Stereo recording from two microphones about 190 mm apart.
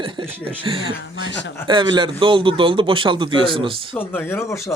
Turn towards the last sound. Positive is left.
turn(degrees=15)  # may be behind; listen again after turning